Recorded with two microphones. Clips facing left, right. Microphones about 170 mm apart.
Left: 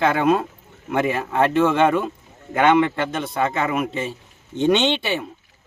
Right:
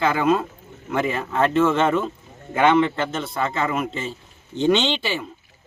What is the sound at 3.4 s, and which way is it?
A man's voice, 15° left (ahead or behind).